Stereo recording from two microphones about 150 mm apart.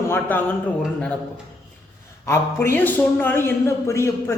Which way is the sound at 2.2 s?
15° left (ahead or behind).